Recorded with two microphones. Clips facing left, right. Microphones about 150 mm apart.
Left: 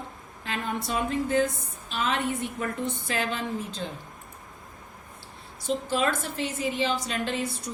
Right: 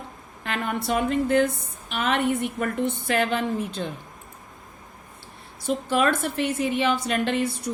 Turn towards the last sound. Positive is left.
turn(degrees=-60)  # may be behind; listen again after turning